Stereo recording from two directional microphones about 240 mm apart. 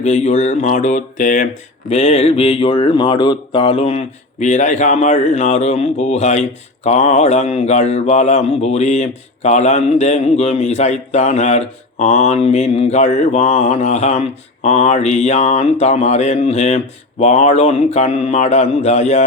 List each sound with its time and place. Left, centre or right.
0.0 s speech: left